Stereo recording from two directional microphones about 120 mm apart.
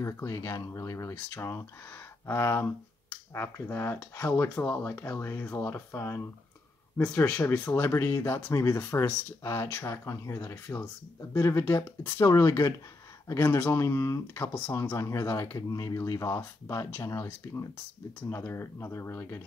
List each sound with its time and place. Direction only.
0.0 s speech: 25° left (ahead or behind)
7.2 s speech: 15° left (ahead or behind)